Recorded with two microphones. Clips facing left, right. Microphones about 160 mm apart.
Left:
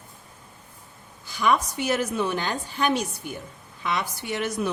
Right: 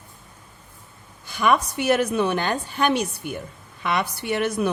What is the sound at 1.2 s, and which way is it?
A woman's voice, 60° right (ahead or behind).